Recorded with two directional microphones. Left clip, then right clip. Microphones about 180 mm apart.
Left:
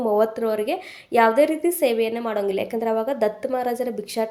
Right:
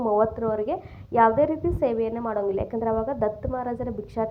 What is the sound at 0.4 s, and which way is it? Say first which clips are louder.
A woman's voice: left 3 dB; 30° left (ahead or behind).